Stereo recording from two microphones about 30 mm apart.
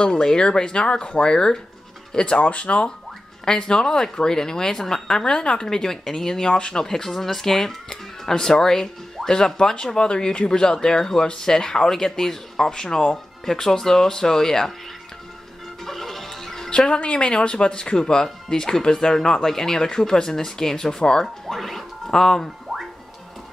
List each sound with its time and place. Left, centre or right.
0.0 s speech: left
2.4 s speech: left
3.4 s speech: left
5.7 s speech: centre
6.9 s speech: centre
15.8 s music: centre
16.7 s speech: left
21.5 s speech: centre
22.7 s music: centre